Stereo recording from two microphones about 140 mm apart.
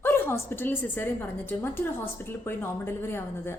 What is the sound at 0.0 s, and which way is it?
A woman's voice, 15° left (ahead or behind).